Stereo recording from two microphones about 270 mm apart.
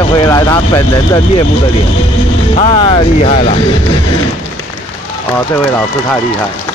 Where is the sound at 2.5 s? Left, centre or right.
Centre.